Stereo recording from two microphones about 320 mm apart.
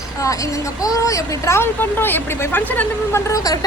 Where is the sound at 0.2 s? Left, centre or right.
Centre.